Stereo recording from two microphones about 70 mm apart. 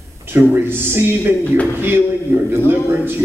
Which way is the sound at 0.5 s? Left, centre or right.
Right.